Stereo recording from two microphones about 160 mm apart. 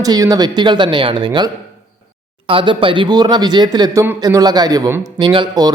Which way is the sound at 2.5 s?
30° right (ahead or behind).